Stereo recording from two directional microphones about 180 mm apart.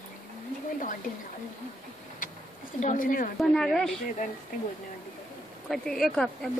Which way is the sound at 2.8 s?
45° left (ahead or behind).